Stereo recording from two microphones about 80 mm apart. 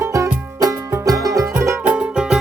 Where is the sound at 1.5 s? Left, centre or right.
Right.